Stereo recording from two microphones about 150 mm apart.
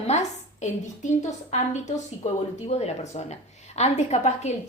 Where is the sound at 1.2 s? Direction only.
50° left (ahead or behind).